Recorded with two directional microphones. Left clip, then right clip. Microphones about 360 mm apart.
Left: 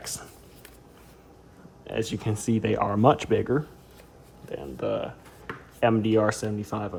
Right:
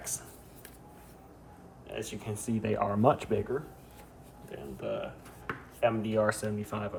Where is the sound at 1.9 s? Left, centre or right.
Left.